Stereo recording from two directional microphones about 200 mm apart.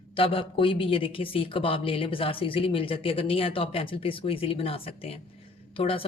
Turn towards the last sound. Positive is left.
turn(degrees=25)  # may be behind; listen again after turning